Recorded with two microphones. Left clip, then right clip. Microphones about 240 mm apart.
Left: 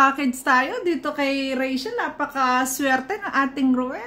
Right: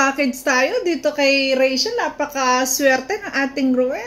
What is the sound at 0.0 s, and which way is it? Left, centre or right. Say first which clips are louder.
A child's voice: right 1 dB; centre.